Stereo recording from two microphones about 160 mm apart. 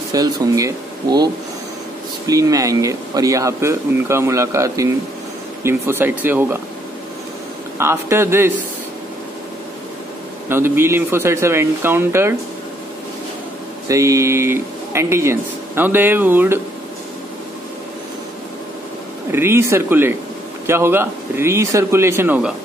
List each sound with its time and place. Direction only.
0.1 s speech: 20° right (ahead or behind)
7.7 s speech: 15° right (ahead or behind)
10.5 s speech: 15° right (ahead or behind)
13.8 s speech: 20° right (ahead or behind)
19.3 s speech: 15° right (ahead or behind)